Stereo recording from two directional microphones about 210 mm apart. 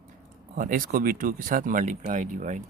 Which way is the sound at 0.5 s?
40° right (ahead or behind).